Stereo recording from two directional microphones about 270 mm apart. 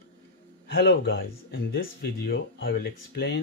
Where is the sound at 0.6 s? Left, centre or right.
Left.